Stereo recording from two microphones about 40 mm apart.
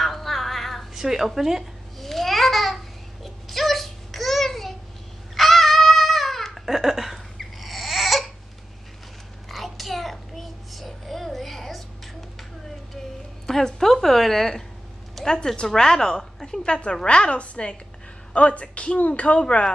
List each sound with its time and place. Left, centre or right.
0.0 s a sound: centre
0.9 s a woman's voice: centre
2.0 s babbling: centre
3.4 s a sound: centre
5.3 s baby cry: centre
6.6 s laughter: centre
7.3 s baby cry: centre
9.5 s child singing: centre
13.5 s a sound: centre
13.9 s a woman's voice: centre
15.2 s a woman's voice: centre
16.6 s a woman's voice: left
19.4 s a woman's voice: left